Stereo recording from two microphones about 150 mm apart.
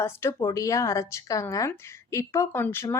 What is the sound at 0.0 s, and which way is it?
A woman's voice, 15° left (ahead or behind).